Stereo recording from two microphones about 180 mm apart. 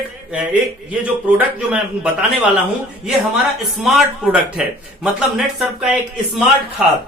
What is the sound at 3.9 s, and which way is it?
Speech, centre (ahead or behind).